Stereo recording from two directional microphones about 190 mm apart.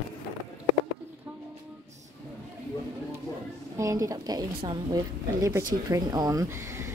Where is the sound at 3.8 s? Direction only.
15° right (ahead or behind).